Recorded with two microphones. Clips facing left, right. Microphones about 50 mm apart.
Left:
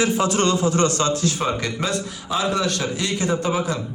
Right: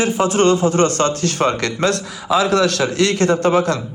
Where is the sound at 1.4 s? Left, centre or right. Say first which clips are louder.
Right 6 dB; right.